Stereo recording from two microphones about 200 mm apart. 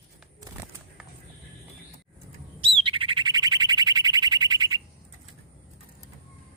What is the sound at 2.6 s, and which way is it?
Bird, 25° right (ahead or behind).